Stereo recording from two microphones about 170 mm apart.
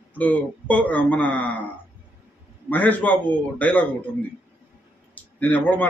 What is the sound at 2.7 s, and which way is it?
A man's voice, 10° left (ahead or behind).